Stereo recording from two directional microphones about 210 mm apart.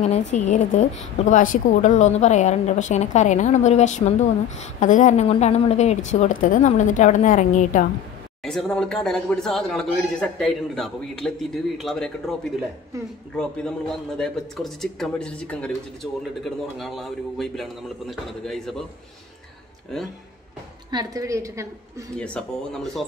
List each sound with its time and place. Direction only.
0.3 s a woman's voice: 35° left (ahead or behind)
8.5 s a man's voice: 5° left (ahead or behind)
20.9 s a woman's voice: 15° right (ahead or behind)
22.2 s a man's voice: 5° left (ahead or behind)